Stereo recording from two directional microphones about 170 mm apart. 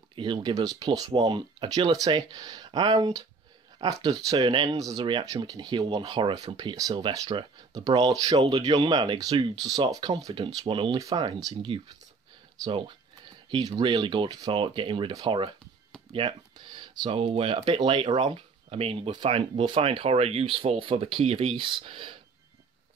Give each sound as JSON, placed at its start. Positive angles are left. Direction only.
{"t": 0.1, "sound": "speech", "side_deg": -30}